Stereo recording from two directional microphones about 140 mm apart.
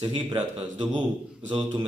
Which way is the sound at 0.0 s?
40° right (ahead or behind).